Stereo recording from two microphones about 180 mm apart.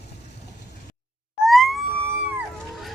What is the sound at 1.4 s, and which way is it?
Siren, centre (ahead or behind).